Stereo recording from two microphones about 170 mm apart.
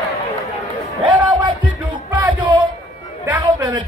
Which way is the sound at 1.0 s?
30° right (ahead or behind).